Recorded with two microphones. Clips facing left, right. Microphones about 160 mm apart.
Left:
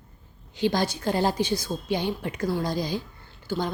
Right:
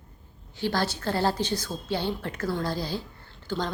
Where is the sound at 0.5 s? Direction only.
15° left (ahead or behind).